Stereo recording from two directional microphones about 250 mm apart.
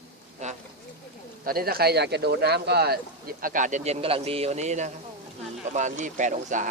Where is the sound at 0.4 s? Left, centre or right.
Right.